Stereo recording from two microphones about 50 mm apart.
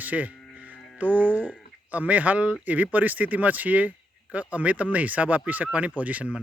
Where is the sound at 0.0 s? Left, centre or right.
Right.